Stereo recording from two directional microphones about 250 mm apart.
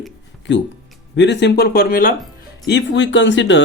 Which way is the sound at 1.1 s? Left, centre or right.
Left.